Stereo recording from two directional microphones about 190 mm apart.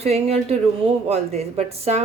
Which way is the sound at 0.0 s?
35° right (ahead or behind).